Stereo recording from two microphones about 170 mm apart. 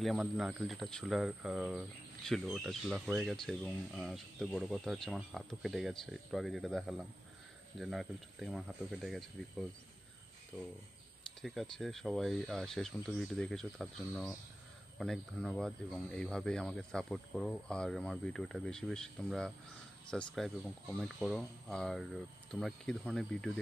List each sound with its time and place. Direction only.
0.0 s speech: centre (ahead or behind)